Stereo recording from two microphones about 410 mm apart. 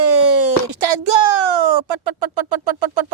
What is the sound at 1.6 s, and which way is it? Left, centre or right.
Speech, right.